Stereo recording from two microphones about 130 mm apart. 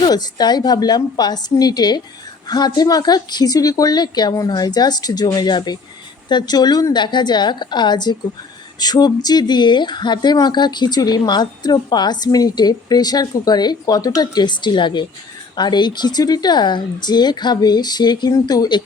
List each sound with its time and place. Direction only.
0.1 s speech: 30° left (ahead or behind)